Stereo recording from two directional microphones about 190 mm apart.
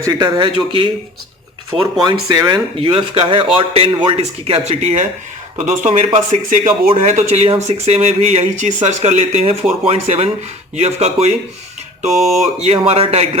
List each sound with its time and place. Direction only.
0.0 s a man's voice: 20° right (ahead or behind)
12.2 s speech: centre (ahead or behind)
12.6 s speech: 30° right (ahead or behind)